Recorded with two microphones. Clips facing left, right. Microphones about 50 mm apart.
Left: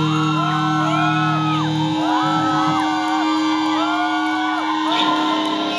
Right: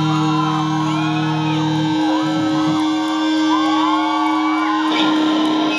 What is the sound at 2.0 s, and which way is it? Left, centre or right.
Music, left.